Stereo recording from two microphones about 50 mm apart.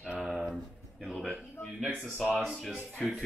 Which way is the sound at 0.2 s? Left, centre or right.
Centre.